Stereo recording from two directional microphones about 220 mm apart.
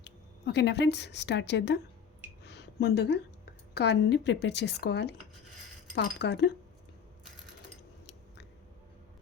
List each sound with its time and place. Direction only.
0.0 s a woman's voice: 50° left (ahead or behind)